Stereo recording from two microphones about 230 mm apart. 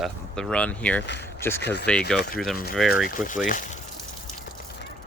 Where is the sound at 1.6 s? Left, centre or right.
Left.